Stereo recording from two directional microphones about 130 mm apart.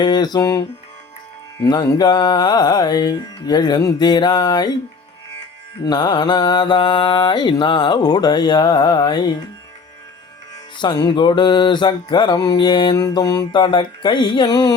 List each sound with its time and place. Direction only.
0.0 s music: 35° left (ahead or behind)
1.6 s music: 35° left (ahead or behind)
5.8 s music: 35° left (ahead or behind)
10.8 s music: 35° left (ahead or behind)